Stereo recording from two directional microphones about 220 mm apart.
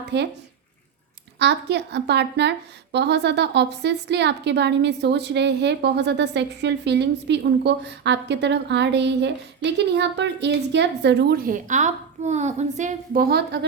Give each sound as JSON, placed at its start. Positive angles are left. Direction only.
{"t": 0.1, "sound": "a woman's voice", "side_deg": -50}
{"t": 1.4, "sound": "a woman's voice", "side_deg": -50}